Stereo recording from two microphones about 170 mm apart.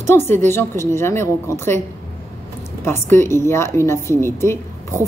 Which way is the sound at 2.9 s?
15° left (ahead or behind).